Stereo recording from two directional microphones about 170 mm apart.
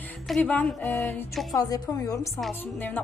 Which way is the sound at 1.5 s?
20° left (ahead or behind).